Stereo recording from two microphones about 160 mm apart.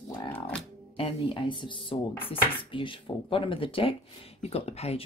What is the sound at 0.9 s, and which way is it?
Speech, 35° left (ahead or behind).